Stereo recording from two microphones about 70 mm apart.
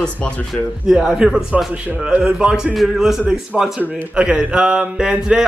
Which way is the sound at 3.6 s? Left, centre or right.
Centre.